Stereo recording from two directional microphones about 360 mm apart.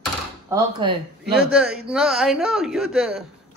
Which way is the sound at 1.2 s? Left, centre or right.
Centre.